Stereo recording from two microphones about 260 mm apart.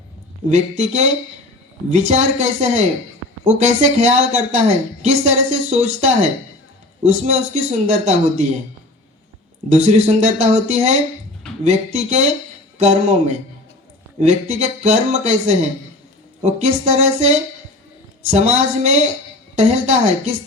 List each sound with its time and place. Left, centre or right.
0.5 s speech: right
9.7 s speech: right